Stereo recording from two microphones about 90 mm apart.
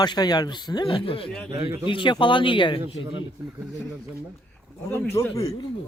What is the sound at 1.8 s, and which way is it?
Speech, 65° left (ahead or behind).